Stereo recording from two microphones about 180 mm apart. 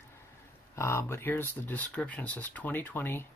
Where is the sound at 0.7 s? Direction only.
15° left (ahead or behind).